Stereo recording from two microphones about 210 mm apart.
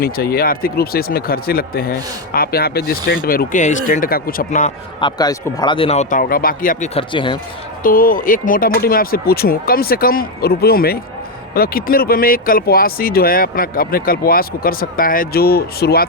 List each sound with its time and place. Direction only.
0.0 s speech: 45° left (ahead or behind)
4.9 s speech: 20° left (ahead or behind)
7.9 s speech: 40° left (ahead or behind)